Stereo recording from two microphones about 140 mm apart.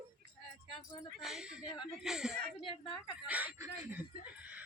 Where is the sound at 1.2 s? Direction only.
Centre (ahead or behind).